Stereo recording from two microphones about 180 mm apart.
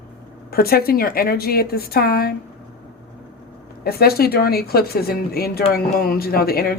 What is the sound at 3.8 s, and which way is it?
Speech, 60° left (ahead or behind).